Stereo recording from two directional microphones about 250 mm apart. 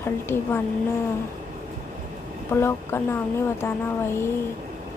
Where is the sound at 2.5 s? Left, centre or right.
Centre.